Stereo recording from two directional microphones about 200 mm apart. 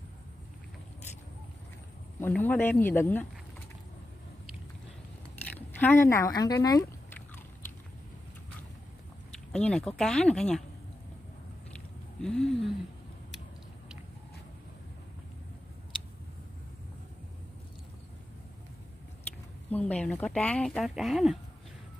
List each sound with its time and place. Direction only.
2.1 s speech: 10° left (ahead or behind)
5.8 s speech: 10° left (ahead or behind)
9.5 s speech: 5° left (ahead or behind)
12.2 s a sound: 5° left (ahead or behind)
19.7 s speech: 10° left (ahead or behind)